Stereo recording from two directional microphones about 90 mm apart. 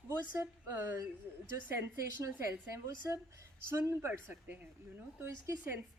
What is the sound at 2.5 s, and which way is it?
A woman's voice, 30° right (ahead or behind).